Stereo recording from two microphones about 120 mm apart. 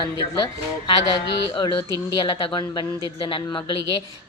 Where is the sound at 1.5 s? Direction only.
35° left (ahead or behind).